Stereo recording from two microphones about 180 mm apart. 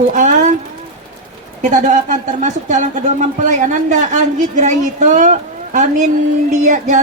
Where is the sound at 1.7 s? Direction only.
45° right (ahead or behind).